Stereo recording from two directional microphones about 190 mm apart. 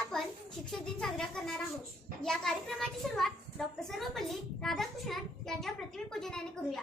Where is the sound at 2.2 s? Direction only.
5° left (ahead or behind).